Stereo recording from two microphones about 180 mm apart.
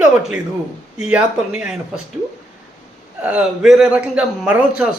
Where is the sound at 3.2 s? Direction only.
5° right (ahead or behind).